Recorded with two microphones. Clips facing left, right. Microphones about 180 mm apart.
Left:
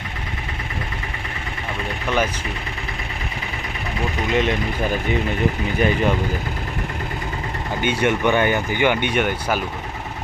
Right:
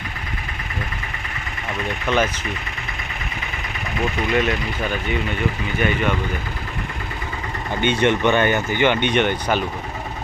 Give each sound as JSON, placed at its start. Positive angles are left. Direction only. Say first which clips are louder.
{"t": 2.0, "sound": "speech", "louder": "right 1 dB", "side_deg": 10}
{"t": 4.4, "sound": "speech", "louder": "left 3 dB", "side_deg": 25}
{"t": 7.8, "sound": "speech", "louder": "right 2 dB", "side_deg": 10}